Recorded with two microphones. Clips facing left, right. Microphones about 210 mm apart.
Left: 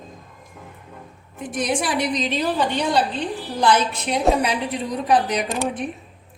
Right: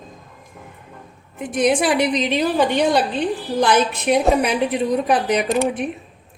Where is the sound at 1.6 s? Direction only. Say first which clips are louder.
Right 6 dB; 65° right (ahead or behind).